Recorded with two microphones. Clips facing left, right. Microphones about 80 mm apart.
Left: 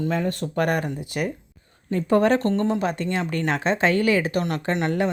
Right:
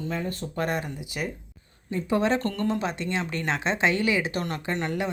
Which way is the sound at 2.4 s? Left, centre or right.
Left.